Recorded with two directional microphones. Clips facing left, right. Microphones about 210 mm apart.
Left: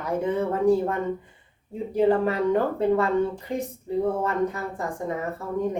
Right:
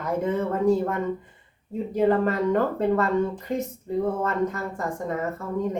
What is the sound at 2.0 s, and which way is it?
Speech, 15° left (ahead or behind).